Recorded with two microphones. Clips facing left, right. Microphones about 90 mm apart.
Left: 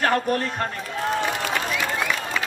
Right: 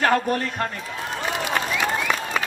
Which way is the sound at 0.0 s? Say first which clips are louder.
Right 1 dB; 25° right (ahead or behind).